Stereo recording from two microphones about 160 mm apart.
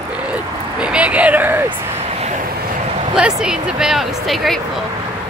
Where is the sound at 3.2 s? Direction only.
5° right (ahead or behind).